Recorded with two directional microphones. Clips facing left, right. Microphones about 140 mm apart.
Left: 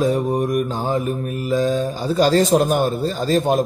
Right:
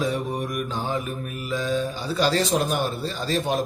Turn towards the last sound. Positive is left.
turn(degrees=45)  # may be behind; listen again after turning